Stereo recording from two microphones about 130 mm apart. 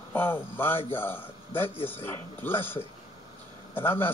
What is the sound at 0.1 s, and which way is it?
A man's voice, 15° left (ahead or behind).